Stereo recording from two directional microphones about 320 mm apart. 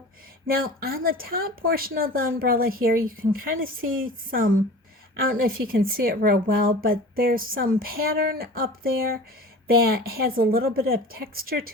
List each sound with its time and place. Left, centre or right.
0.5 s speech: right